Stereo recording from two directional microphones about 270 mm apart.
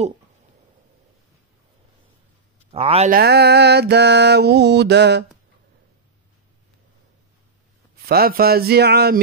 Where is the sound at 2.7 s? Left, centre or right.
Right.